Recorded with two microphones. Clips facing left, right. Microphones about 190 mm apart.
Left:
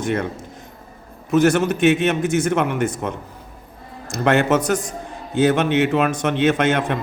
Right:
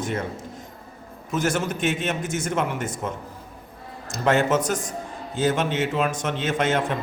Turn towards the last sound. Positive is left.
turn(degrees=65)  # may be behind; listen again after turning